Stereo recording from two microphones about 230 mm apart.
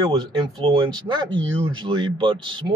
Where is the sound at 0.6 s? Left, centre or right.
Centre.